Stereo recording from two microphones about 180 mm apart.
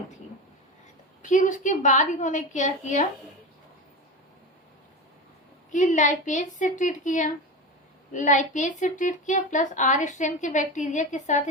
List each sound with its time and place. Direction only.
1.2 s a woman's voice: 45° left (ahead or behind)
5.7 s a woman's voice: 45° left (ahead or behind)